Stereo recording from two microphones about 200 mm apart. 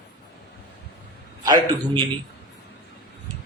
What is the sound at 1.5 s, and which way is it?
Speech, 20° right (ahead or behind).